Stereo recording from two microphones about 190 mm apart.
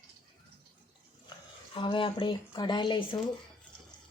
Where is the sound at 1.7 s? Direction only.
25° left (ahead or behind).